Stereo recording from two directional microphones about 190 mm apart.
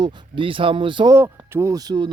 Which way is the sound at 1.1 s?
15° right (ahead or behind).